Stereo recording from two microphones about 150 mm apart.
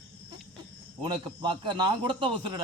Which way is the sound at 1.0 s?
30° right (ahead or behind).